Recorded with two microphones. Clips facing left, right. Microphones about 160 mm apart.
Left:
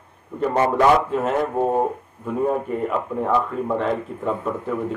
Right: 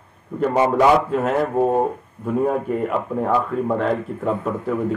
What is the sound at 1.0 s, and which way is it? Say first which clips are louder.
A man's voice: right 2 dB; centre (ahead or behind).